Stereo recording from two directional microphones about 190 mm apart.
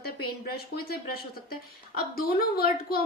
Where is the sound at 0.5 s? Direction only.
55° left (ahead or behind).